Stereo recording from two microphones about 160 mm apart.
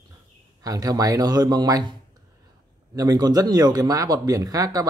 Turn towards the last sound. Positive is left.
turn(degrees=-20)  # may be behind; listen again after turning